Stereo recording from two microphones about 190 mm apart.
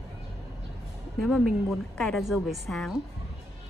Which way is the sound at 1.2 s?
Centre (ahead or behind).